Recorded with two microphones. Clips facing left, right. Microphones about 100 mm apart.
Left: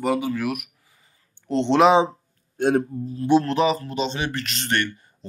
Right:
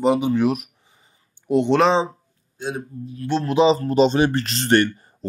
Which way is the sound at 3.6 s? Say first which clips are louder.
Right 5 dB; 25° right (ahead or behind).